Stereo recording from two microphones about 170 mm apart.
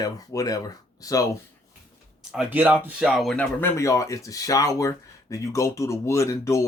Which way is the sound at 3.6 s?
20° left (ahead or behind).